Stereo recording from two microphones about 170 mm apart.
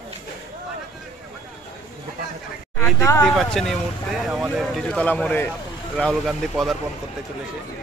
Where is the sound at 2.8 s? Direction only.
15° left (ahead or behind).